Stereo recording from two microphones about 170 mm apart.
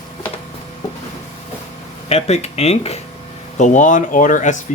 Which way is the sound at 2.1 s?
40° left (ahead or behind).